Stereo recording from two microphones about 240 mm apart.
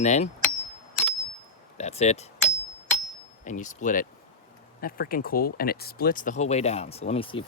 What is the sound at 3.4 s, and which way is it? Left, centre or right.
Speech, left.